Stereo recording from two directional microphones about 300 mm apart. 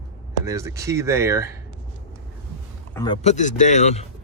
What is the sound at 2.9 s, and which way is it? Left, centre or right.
Speech, centre.